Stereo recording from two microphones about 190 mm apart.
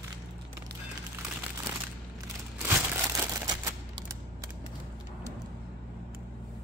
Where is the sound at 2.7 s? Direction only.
15° right (ahead or behind).